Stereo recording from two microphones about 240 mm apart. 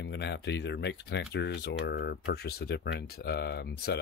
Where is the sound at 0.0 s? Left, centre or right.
Left.